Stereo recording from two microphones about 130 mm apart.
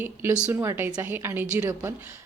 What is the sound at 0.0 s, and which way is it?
A woman's voice, 15° right (ahead or behind).